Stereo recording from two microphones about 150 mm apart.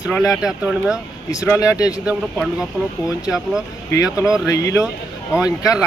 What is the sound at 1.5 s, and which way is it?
Speech, 20° left (ahead or behind).